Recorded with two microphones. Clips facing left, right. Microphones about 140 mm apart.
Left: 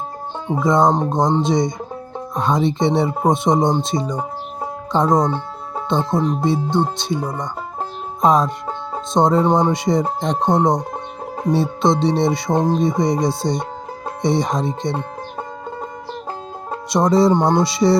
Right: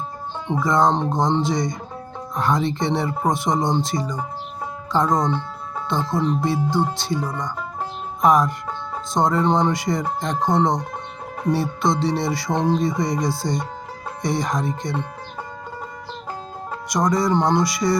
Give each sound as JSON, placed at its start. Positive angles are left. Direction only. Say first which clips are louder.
{"t": 0.6, "sound": "speech", "louder": "left 3 dB", "side_deg": 20}
{"t": 5.2, "sound": "music", "louder": "left 2 dB", "side_deg": 35}
{"t": 5.9, "sound": "speech", "louder": "left 3 dB", "side_deg": 20}
{"t": 16.9, "sound": "speech", "louder": "left 5 dB", "side_deg": 25}